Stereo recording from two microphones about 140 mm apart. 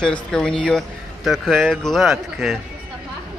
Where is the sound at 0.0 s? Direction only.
5° left (ahead or behind).